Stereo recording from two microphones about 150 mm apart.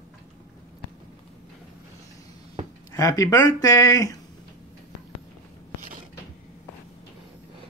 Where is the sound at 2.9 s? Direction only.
25° left (ahead or behind).